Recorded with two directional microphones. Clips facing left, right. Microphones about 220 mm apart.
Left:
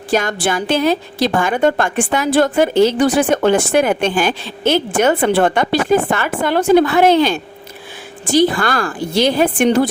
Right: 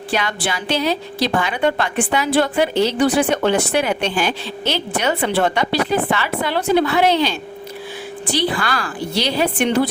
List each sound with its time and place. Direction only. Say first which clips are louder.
0.1 s a woman's voice: left 6 dB; 45° left (ahead or behind)